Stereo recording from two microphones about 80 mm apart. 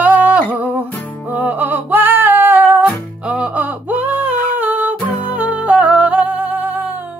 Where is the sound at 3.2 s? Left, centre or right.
Centre.